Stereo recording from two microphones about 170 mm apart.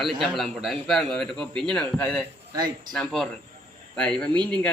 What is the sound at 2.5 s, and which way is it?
Speech, 25° right (ahead or behind).